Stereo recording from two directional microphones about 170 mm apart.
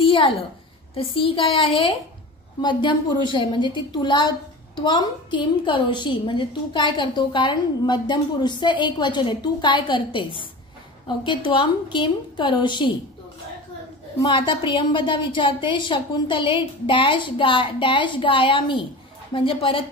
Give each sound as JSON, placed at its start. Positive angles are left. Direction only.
{"t": 0.0, "sound": "a sound", "side_deg": 30}
{"t": 0.9, "sound": "a woman's voice", "side_deg": 30}
{"t": 14.2, "sound": "a woman's voice", "side_deg": 30}